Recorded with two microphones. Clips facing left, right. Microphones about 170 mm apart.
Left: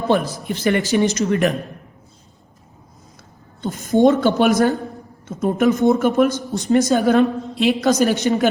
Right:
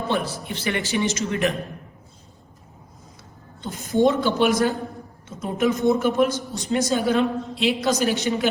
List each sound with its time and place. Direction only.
0.1 s a woman's voice: 45° left (ahead or behind)
3.6 s a woman's voice: 50° left (ahead or behind)
5.5 s speech: 60° left (ahead or behind)
6.7 s a woman's voice: 45° left (ahead or behind)